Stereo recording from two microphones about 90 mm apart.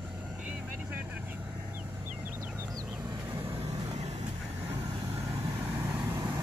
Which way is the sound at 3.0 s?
70° right (ahead or behind).